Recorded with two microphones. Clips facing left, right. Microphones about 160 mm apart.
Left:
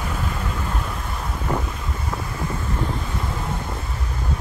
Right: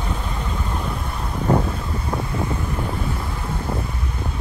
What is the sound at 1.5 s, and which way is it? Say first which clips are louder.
Vehicle: right 7 dB; 35° right (ahead or behind).